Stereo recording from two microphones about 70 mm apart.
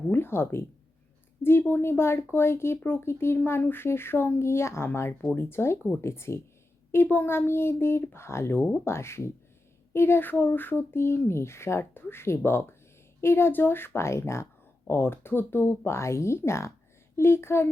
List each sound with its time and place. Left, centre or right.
0.1 s speech: left